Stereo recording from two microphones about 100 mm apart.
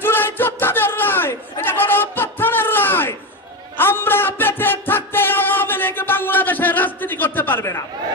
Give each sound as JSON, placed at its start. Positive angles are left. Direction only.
{"t": 0.0, "sound": "chatter", "side_deg": 20}
{"t": 3.7, "sound": "music", "side_deg": 20}